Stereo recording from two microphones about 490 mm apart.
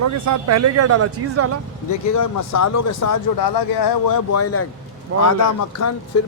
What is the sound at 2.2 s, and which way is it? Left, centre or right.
A man's voice, left.